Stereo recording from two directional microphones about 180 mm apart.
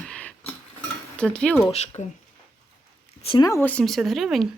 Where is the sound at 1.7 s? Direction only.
35° left (ahead or behind).